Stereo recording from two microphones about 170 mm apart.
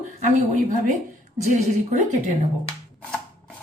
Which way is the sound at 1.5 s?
45° right (ahead or behind).